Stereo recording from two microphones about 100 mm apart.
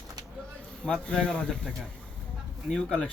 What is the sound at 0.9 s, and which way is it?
A man's voice, 10° left (ahead or behind).